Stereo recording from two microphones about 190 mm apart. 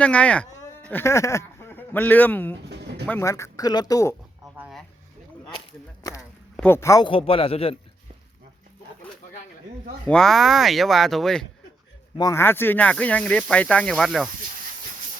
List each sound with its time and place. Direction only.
0.0 s speech: 5° left (ahead or behind)
2.6 s pigeon: 60° right (ahead or behind)
3.1 s speech: 15° left (ahead or behind)
4.5 s a sound: centre (ahead or behind)
6.6 s speech: 10° left (ahead or behind)
7.1 s a man's voice: 30° left (ahead or behind)
10.1 s speech: centre (ahead or behind)
12.1 s speech: 15° left (ahead or behind); by 14.3 s centre (ahead or behind)